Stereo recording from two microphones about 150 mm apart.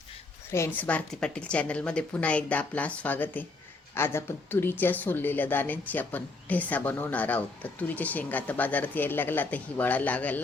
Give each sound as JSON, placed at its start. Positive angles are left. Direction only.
{"t": 0.5, "sound": "a woman's voice", "side_deg": 15}